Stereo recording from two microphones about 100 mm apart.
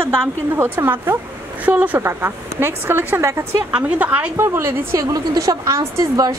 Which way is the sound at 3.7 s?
15° right (ahead or behind).